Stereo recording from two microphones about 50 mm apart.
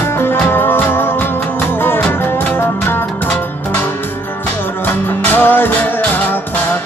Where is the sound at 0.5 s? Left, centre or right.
Left.